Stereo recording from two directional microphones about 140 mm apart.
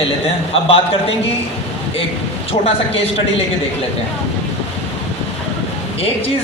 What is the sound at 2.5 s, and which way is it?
Speech, 45° left (ahead or behind).